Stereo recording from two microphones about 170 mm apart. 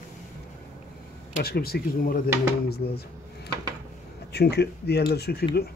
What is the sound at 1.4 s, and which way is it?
Speech, 65° left (ahead or behind).